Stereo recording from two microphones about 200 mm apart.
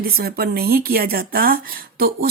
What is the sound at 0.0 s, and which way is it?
A woman's voice, 50° right (ahead or behind).